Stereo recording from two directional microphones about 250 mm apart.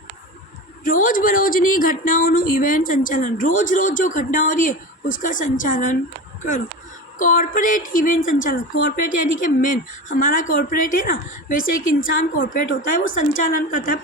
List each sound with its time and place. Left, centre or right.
0.9 s speech: left
7.2 s speech: left